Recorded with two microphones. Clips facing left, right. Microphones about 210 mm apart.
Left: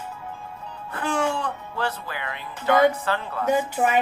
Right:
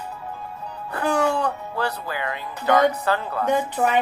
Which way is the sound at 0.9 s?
40° right (ahead or behind).